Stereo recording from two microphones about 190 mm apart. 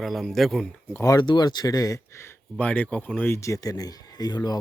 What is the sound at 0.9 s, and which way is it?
Speech, 15° left (ahead or behind).